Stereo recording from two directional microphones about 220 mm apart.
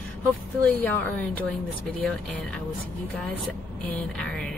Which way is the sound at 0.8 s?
10° left (ahead or behind).